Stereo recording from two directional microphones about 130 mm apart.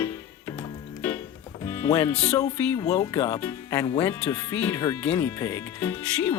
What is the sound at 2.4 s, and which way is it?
Speech, 25° left (ahead or behind).